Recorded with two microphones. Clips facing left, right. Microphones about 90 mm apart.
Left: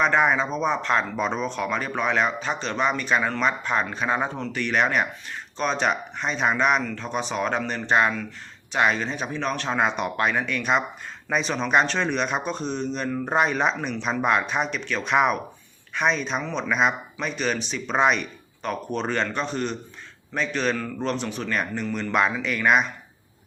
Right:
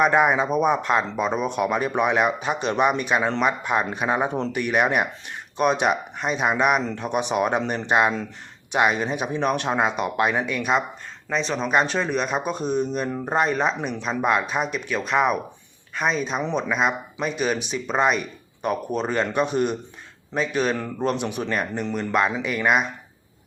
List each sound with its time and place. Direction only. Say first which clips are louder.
0.0 s speech: right 2 dB; 10° right (ahead or behind)
6.8 s speech: right 3 dB; 20° right (ahead or behind)
9.8 s speech: left 1 dB; 5° right (ahead or behind)
21.9 s speech: right 1 dB; centre (ahead or behind)